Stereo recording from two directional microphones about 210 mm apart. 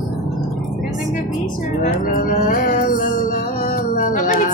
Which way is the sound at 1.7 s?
40° left (ahead or behind).